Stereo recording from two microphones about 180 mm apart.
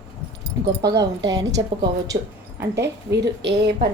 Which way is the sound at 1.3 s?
20° right (ahead or behind).